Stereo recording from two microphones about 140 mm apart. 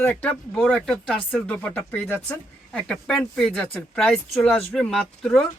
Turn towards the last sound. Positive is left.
turn(degrees=5)  # may be behind; listen again after turning